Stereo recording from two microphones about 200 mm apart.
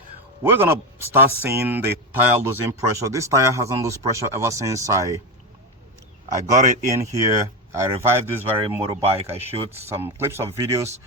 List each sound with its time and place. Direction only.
0.4 s a man's voice: 10° right (ahead or behind)
6.2 s a man's voice: 35° right (ahead or behind)
6.9 s a man's voice: 15° right (ahead or behind)
8.8 s speech: 30° right (ahead or behind)
9.7 s a man's voice: 10° right (ahead or behind)